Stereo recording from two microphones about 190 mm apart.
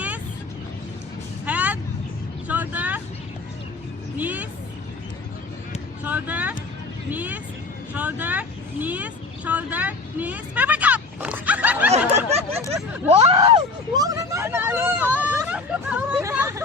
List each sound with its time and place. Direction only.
1.5 s vehicle: 10° right (ahead or behind)
4.2 s vehicle: 10° right (ahead or behind)
6.1 s a sound: 10° right (ahead or behind)
7.1 s speech: 10° right (ahead or behind)
7.9 s vehicle: 10° right (ahead or behind)
13.1 s hubbub: 30° right (ahead or behind); by 16.2 s 5° right (ahead or behind)
16.2 s a sound: 15° right (ahead or behind)